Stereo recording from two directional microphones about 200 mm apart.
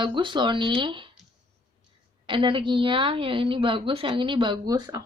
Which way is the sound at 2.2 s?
25° right (ahead or behind).